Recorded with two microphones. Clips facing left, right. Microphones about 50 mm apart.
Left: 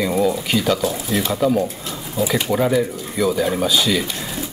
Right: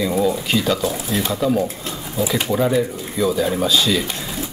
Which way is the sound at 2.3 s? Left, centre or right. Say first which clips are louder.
Even; centre.